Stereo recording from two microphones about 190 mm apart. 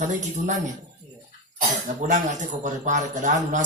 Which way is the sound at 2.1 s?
40° right (ahead or behind).